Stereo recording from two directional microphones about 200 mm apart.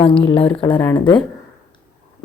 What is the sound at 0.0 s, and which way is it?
Speech, 25° left (ahead or behind).